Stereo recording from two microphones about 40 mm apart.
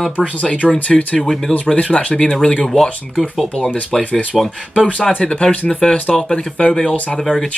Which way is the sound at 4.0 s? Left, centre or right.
Left.